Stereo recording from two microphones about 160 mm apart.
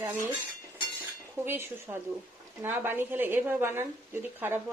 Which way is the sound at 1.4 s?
15° right (ahead or behind).